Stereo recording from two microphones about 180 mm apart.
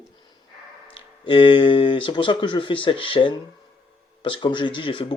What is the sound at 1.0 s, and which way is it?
Speech, 25° left (ahead or behind).